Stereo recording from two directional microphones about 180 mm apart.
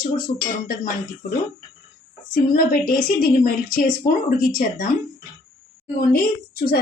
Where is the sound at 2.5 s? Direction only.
50° left (ahead or behind).